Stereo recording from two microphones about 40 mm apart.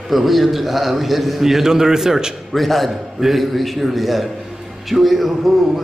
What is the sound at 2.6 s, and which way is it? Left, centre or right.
A man's voice, centre.